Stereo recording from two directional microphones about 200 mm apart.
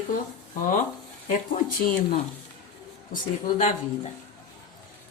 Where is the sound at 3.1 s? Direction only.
40° left (ahead or behind).